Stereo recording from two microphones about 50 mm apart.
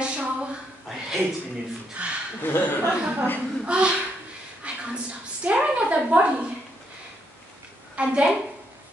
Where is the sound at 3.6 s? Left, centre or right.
Right.